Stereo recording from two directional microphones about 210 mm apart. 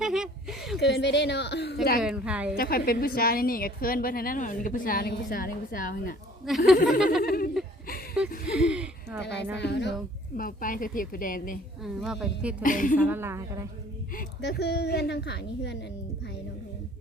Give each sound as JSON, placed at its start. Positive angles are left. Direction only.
{"t": 0.0, "sound": "a sound", "side_deg": -5}
{"t": 0.8, "sound": "a woman's voice", "side_deg": 55}
{"t": 2.0, "sound": "speech", "side_deg": -5}
{"t": 2.6, "sound": "a woman's voice", "side_deg": 45}
{"t": 6.5, "sound": "speech", "side_deg": 0}
{"t": 7.2, "sound": "a sound", "side_deg": 45}
{"t": 8.4, "sound": "a sound", "side_deg": -5}
{"t": 9.6, "sound": "a woman's voice", "side_deg": 55}
{"t": 10.3, "sound": "a woman's voice", "side_deg": 40}
{"t": 11.8, "sound": "speech", "side_deg": 0}
{"t": 12.6, "sound": "a woman's voice", "side_deg": 40}
{"t": 13.1, "sound": "a woman's voice", "side_deg": -10}
{"t": 14.4, "sound": "a woman's voice", "side_deg": 50}